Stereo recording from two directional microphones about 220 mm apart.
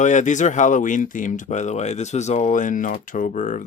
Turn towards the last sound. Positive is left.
turn(degrees=35)  # may be behind; listen again after turning